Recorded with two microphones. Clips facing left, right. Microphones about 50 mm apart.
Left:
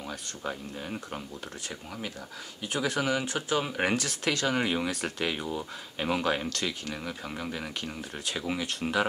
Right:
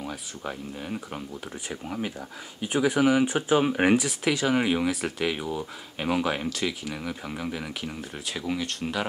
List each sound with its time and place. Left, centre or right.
0.0 s speech: centre
1.7 s speech: centre
3.8 s speech: centre